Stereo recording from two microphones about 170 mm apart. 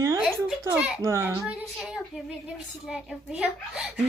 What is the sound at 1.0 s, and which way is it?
Speech, 15° right (ahead or behind).